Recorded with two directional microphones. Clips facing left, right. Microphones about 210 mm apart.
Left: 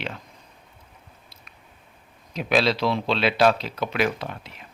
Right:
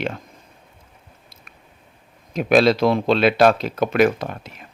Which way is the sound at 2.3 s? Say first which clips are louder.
Right 7 dB; 50° right (ahead or behind).